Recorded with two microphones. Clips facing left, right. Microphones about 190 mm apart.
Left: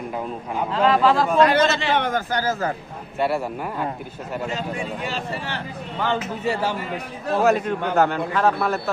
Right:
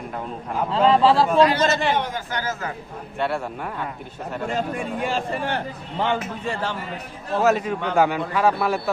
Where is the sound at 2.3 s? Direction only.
35° left (ahead or behind).